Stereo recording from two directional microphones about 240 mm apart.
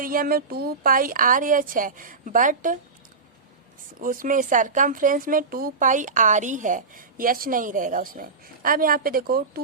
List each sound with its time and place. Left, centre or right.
0.0 s a woman's voice: right
4.0 s a woman's voice: right